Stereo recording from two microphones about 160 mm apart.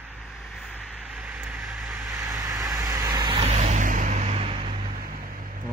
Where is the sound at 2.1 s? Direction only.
20° right (ahead or behind).